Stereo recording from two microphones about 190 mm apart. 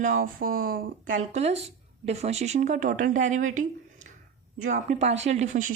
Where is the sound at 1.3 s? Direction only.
35° right (ahead or behind).